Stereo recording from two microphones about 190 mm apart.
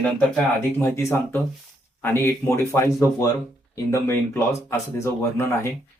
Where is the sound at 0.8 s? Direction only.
15° left (ahead or behind).